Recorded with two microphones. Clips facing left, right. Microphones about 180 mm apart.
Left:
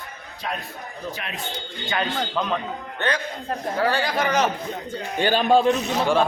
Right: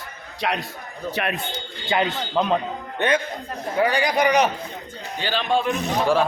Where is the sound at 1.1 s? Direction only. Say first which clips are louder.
Right 9 dB; 65° right (ahead or behind).